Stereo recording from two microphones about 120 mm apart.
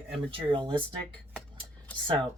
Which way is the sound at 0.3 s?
45° right (ahead or behind).